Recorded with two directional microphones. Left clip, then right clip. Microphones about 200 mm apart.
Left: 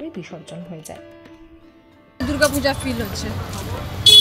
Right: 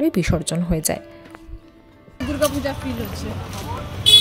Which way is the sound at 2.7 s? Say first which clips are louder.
Left 6 dB; 5° left (ahead or behind).